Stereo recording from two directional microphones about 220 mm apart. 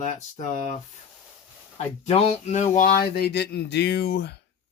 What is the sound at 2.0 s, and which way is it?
Speech, 30° left (ahead or behind).